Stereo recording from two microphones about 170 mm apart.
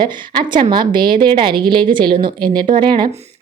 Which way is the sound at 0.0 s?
25° right (ahead or behind).